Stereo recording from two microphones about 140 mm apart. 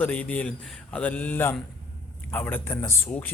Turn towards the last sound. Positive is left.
turn(degrees=20)  # may be behind; listen again after turning